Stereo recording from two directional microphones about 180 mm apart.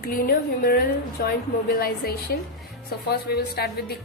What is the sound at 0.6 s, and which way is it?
A woman's voice, 60° left (ahead or behind).